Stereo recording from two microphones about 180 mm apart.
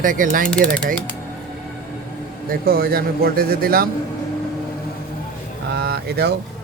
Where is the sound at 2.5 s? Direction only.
55° right (ahead or behind).